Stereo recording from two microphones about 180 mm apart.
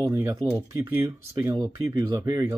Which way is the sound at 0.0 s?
20° right (ahead or behind).